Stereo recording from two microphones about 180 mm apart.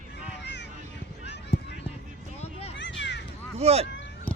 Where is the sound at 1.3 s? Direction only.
70° left (ahead or behind).